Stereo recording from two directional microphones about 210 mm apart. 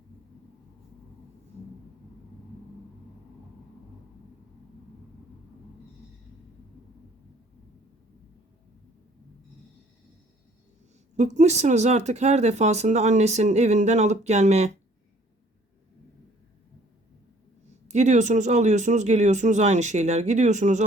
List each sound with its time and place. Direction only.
11.2 s speech: 35° right (ahead or behind)
17.8 s speech: 35° right (ahead or behind)